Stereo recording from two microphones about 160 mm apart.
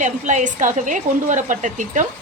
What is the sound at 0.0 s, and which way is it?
A woman's voice, 50° right (ahead or behind).